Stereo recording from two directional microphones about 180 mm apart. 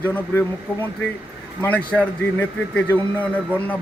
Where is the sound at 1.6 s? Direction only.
10° left (ahead or behind).